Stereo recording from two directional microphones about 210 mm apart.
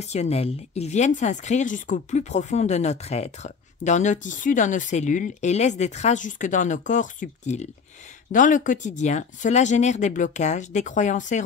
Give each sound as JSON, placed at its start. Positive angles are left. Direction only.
{"t": 0.0, "sound": "speech", "side_deg": 30}